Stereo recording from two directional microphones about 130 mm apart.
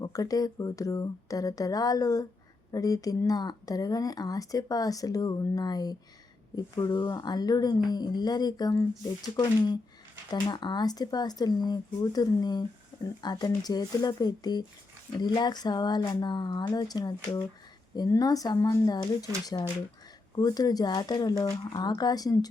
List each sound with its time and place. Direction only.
0.0 s speech: 25° left (ahead or behind)
20.3 s speech: 30° left (ahead or behind)